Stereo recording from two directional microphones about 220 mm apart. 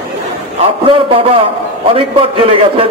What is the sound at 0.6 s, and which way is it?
A man's voice, 25° right (ahead or behind).